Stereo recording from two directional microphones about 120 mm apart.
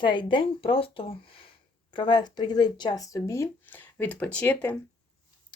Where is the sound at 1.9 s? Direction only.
40° left (ahead or behind); by 4.7 s 15° left (ahead or behind).